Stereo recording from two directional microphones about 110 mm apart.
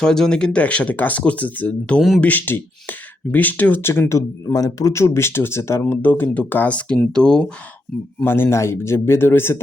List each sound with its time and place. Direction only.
0.0 s speech: 5° left (ahead or behind)
2.0 s speech: centre (ahead or behind)
2.2 s speech: 15° left (ahead or behind)
8.2 s speech: 20° left (ahead or behind)